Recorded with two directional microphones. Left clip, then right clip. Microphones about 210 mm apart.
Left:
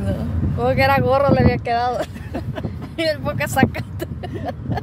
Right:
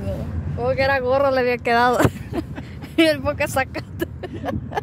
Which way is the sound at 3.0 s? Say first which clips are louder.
Right 3 dB; 25° right (ahead or behind).